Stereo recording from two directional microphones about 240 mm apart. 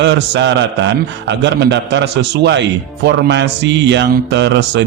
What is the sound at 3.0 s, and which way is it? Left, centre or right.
A man's voice, right.